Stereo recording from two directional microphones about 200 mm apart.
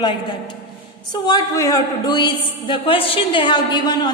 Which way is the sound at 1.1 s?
20° left (ahead or behind).